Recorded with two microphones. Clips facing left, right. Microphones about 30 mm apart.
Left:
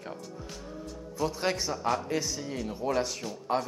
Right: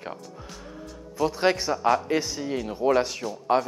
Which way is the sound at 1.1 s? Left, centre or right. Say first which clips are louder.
Right 7 dB; centre.